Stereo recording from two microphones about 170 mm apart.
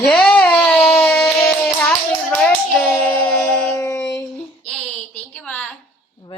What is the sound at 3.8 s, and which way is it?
Music, 15° left (ahead or behind).